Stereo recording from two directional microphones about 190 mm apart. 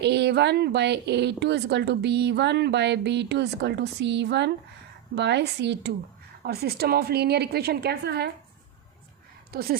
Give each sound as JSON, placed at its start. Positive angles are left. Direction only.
{"t": 0.0, "sound": "a woman's voice", "side_deg": -60}
{"t": 9.5, "sound": "speech", "side_deg": -55}